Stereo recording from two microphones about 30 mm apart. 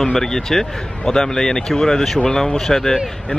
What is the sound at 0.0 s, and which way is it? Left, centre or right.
Speech, centre.